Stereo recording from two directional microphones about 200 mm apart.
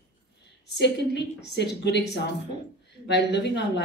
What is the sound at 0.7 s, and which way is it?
Speech, 60° left (ahead or behind).